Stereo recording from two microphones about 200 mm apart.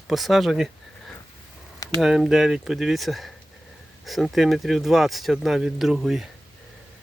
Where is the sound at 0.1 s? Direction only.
Centre (ahead or behind).